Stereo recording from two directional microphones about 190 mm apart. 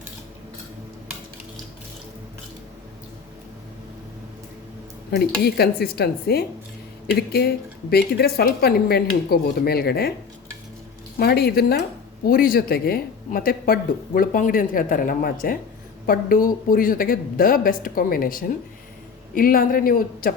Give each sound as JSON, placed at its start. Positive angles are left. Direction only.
{"t": 5.1, "sound": "speech", "side_deg": 55}
{"t": 11.2, "sound": "speech", "side_deg": 55}